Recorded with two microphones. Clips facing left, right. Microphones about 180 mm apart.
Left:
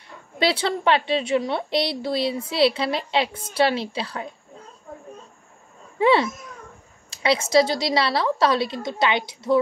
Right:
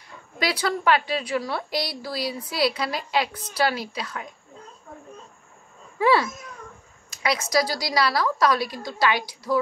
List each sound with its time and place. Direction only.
0.4 s a woman's voice: 25° left (ahead or behind)
5.9 s a child's voice: 25° left (ahead or behind)